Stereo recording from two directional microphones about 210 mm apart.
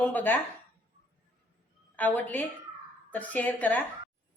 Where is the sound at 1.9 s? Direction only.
10° left (ahead or behind).